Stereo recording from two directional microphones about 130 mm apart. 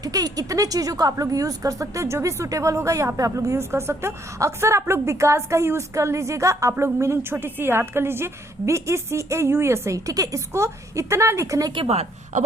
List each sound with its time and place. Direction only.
0.0 s a woman's voice: 30° right (ahead or behind)
11.7 s speech: 45° right (ahead or behind)